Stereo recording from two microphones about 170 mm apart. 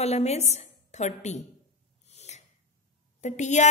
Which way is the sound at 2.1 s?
40° left (ahead or behind).